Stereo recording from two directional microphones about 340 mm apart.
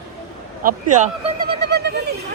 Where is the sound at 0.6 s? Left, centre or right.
Right.